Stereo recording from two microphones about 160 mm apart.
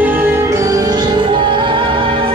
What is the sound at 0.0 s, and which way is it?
Music, 15° right (ahead or behind).